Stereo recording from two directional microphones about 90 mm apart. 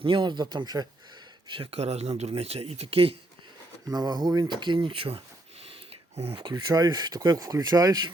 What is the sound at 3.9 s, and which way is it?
Speech, 45° right (ahead or behind).